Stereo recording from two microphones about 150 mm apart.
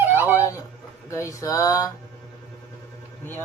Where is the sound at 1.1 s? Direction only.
20° left (ahead or behind).